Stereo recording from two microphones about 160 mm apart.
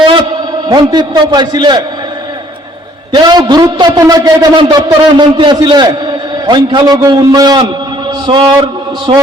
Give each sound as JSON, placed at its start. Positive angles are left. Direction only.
{"t": 0.0, "sound": "a sound", "side_deg": -30}
{"t": 0.7, "sound": "a man's voice", "side_deg": -25}
{"t": 3.1, "sound": "a man's voice", "side_deg": -25}